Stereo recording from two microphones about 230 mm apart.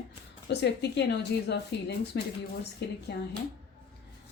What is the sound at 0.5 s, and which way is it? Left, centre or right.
A woman's voice, left.